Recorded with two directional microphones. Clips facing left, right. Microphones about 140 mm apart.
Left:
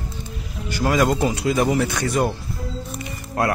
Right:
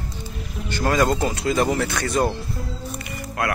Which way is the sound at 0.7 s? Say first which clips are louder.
Left 1 dB; 10° left (ahead or behind).